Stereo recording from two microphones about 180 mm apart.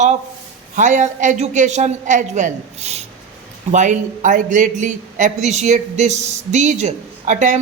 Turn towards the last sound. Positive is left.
turn(degrees=-45)  # may be behind; listen again after turning